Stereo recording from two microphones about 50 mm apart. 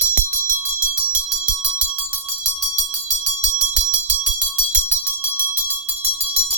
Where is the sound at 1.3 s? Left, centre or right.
Centre.